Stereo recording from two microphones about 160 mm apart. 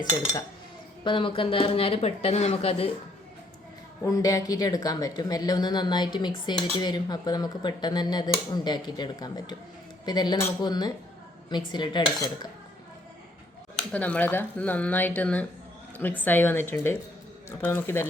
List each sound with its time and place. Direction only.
0.0 s speech: 25° left (ahead or behind)
4.0 s speech: 20° left (ahead or behind)
13.7 s speech: 10° left (ahead or behind)